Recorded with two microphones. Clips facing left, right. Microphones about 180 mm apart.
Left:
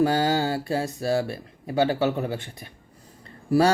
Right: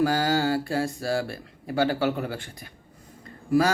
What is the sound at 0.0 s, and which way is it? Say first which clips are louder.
Mantra: left 1 dB; 25° left (ahead or behind).